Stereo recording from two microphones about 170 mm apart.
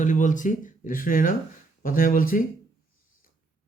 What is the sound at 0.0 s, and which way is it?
Speech, 50° left (ahead or behind).